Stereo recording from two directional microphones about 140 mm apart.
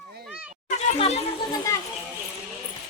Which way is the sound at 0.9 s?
50° left (ahead or behind).